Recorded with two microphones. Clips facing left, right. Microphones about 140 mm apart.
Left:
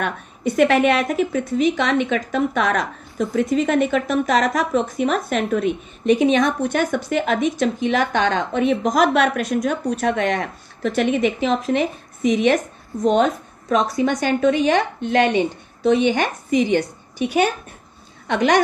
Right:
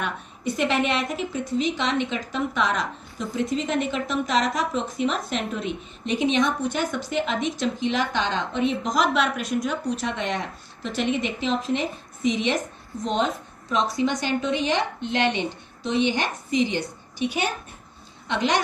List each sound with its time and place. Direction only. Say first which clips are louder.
0.0 s a woman's voice: left 5 dB; 55° left (ahead or behind)
15.8 s a woman's voice: left 7 dB; 55° left (ahead or behind)